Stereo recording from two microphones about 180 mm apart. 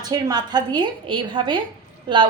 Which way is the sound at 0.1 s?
25° right (ahead or behind).